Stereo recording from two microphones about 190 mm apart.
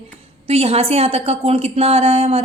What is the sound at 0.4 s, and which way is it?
A woman's voice, 35° right (ahead or behind).